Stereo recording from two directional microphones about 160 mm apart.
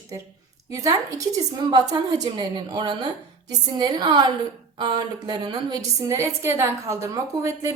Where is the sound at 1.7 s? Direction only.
25° right (ahead or behind).